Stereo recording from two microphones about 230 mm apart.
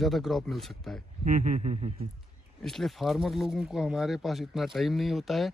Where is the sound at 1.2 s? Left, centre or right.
Right.